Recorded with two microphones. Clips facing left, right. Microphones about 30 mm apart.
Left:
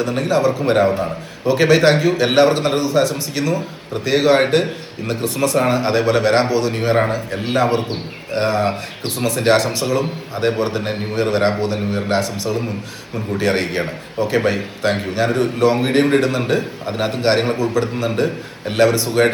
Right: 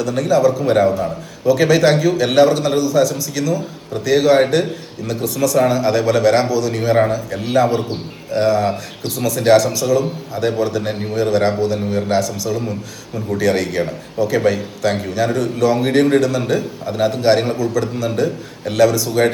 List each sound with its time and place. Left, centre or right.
0.0 s a man's voice: left
10.8 s a man's voice: left
11.8 s speech: centre
12.2 s a man's voice: left